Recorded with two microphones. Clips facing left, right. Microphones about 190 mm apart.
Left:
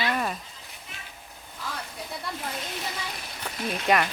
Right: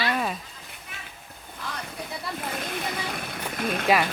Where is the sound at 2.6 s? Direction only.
55° right (ahead or behind).